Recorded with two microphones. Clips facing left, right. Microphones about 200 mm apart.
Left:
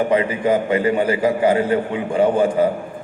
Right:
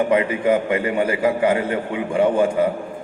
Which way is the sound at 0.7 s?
30° left (ahead or behind).